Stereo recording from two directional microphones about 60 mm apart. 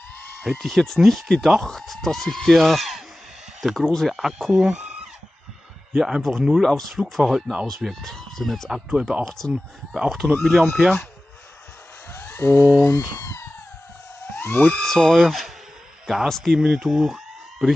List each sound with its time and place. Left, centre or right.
0.4 s speech: centre
4.1 s speech: centre
4.6 s a sound: centre
5.9 s speech: centre
12.1 s speech: left
13.2 s cat: left
14.3 s a sound: left
14.9 s speech: centre